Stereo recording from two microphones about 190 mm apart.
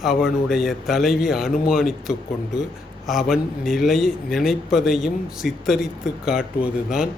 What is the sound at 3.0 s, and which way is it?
A man's voice, centre (ahead or behind).